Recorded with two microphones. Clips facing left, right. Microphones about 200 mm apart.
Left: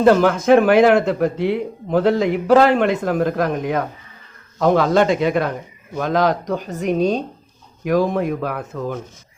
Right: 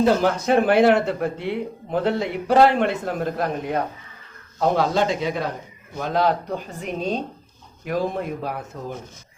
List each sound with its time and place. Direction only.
0.0 s a man's voice: 60° left (ahead or behind); by 0.8 s 90° left
0.9 s speech: 40° left (ahead or behind)
1.4 s a man's voice: 90° left
4.6 s speech: 60° left (ahead or behind)
6.0 s a man's voice: 90° left
6.8 s speech: 70° left (ahead or behind)